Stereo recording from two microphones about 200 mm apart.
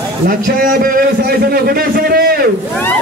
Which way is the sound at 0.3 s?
45° right (ahead or behind).